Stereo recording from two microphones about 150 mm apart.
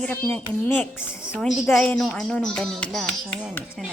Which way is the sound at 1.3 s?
5° left (ahead or behind).